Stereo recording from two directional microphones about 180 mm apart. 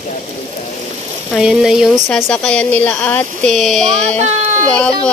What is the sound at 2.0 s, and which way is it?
Speech, 10° left (ahead or behind).